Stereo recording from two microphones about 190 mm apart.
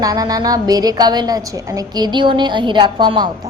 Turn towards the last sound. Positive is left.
turn(degrees=-25)  # may be behind; listen again after turning